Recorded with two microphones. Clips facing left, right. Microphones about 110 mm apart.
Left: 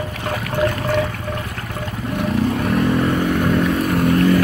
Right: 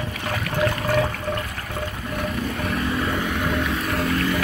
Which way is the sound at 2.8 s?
50° left (ahead or behind).